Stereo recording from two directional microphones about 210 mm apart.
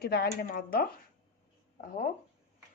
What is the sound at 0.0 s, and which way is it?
Speech, 50° left (ahead or behind).